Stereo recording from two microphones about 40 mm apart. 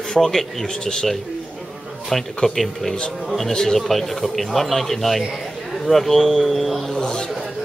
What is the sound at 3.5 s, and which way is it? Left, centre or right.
Speech, centre.